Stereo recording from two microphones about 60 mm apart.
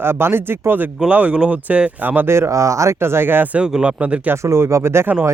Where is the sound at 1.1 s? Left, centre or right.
Right.